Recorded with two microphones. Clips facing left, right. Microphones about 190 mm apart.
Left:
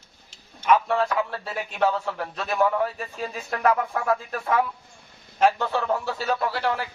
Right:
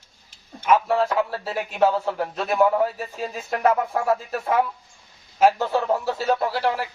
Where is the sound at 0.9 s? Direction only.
30° right (ahead or behind).